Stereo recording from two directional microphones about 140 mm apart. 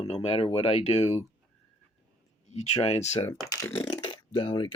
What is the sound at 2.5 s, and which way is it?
Speech, 55° left (ahead or behind).